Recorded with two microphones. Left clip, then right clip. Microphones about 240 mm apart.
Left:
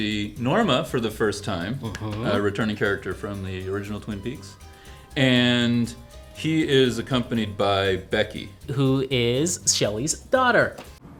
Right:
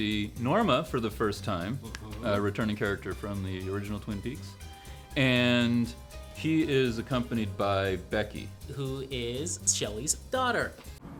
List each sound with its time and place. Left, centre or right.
0.0 s speech: right
8.7 s speech: left